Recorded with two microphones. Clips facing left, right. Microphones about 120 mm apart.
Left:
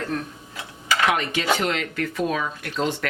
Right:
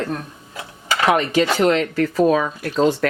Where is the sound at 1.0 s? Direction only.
35° right (ahead or behind).